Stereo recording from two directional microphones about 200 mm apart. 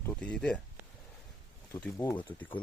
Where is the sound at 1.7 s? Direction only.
10° left (ahead or behind).